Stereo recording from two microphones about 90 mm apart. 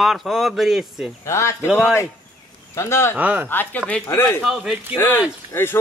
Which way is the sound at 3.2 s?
20° right (ahead or behind).